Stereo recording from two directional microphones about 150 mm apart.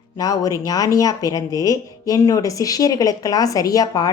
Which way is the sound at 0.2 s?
25° left (ahead or behind).